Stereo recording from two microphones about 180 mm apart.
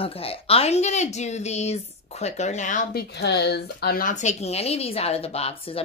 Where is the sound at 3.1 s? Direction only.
70° left (ahead or behind).